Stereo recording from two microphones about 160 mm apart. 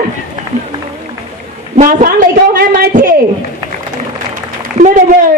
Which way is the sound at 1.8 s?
55° right (ahead or behind).